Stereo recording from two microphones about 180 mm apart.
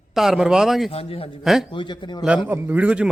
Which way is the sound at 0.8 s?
30° left (ahead or behind).